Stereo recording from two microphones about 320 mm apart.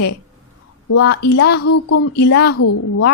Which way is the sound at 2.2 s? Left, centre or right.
Left.